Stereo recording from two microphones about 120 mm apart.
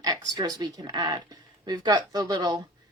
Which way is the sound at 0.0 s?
30° right (ahead or behind).